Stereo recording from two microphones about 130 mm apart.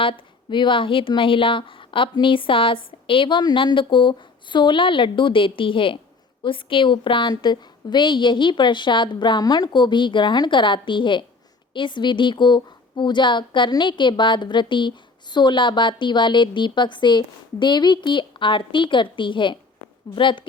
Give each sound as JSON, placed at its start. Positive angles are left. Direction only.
{"t": 0.0, "sound": "speech", "side_deg": 40}